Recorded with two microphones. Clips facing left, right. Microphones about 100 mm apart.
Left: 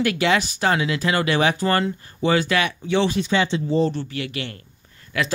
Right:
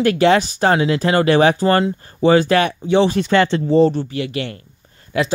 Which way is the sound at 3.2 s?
70° right (ahead or behind).